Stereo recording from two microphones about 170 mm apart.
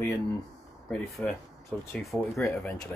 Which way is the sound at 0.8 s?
Centre (ahead or behind).